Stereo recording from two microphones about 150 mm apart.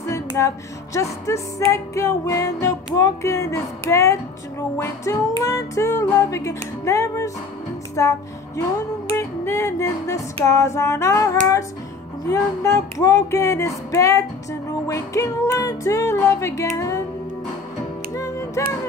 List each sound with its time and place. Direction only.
0.1 s music: 20° left (ahead or behind)
18.1 s music: 20° left (ahead or behind)